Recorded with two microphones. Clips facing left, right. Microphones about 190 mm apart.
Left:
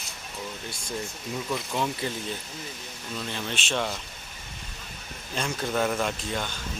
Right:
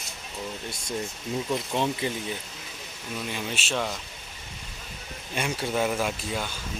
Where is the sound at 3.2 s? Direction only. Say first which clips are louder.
Even; 10° right (ahead or behind).